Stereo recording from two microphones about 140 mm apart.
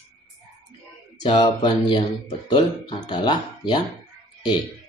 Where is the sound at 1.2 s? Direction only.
35° left (ahead or behind).